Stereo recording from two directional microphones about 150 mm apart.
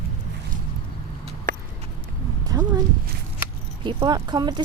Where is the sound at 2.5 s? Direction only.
25° right (ahead or behind).